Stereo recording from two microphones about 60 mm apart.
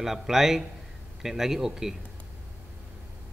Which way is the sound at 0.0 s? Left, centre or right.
Centre.